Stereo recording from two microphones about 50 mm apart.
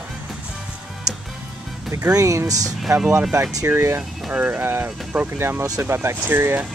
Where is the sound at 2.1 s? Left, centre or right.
Right.